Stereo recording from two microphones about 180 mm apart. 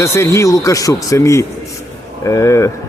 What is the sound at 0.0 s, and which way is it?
Speech, 15° left (ahead or behind).